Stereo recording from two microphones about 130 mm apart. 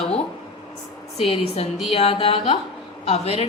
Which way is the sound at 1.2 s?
45° left (ahead or behind).